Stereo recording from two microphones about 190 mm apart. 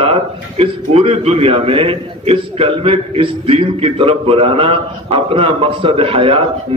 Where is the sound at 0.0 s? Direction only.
30° right (ahead or behind).